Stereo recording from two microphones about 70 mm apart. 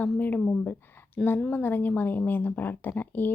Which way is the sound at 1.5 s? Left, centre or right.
Left.